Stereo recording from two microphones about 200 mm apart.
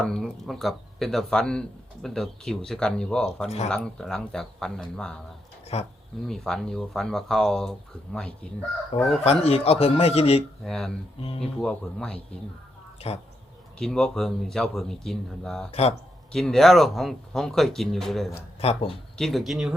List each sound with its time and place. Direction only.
0.0 s speech: 5° left (ahead or behind)
5.7 s a man's voice: 30° left (ahead or behind)
6.2 s speech: centre (ahead or behind)
9.2 s a man's voice: 30° left (ahead or behind)
10.6 s speech: centre (ahead or behind)
11.2 s speech: 30° left (ahead or behind)
11.6 s speech: 5° left (ahead or behind)
13.0 s a man's voice: 30° left (ahead or behind)
13.7 s speech: 5° left (ahead or behind)
15.7 s a man's voice: 30° left (ahead or behind)
16.3 s speech: centre (ahead or behind)
18.6 s speech: 30° left (ahead or behind)
18.9 s speech: centre (ahead or behind)